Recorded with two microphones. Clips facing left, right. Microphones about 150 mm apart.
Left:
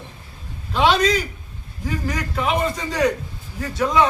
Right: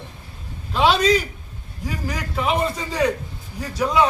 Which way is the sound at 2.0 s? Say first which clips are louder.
Even; 5° right (ahead or behind).